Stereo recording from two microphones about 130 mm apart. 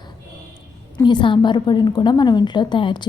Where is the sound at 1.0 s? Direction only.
35° left (ahead or behind).